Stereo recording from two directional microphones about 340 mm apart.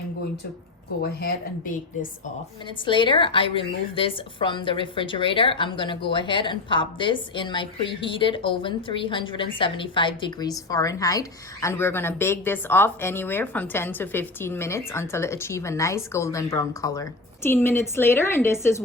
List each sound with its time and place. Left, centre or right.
1.0 s a woman's voice: left
2.6 s a woman's voice: centre